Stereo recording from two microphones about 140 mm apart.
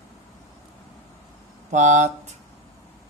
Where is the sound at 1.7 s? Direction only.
60° right (ahead or behind).